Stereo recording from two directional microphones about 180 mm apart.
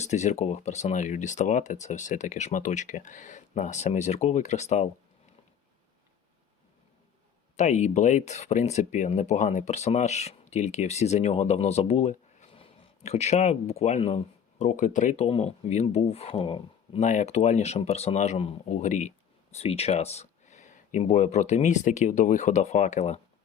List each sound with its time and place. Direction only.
0.0 s speech: 40° left (ahead or behind)
7.5 s speech: 40° left (ahead or behind)